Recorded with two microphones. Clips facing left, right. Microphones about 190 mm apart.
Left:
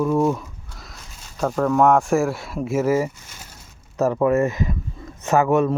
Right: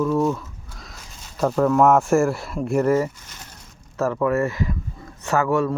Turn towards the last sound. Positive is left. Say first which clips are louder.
# left 3 dB
turn(degrees=20)  # may be behind; listen again after turning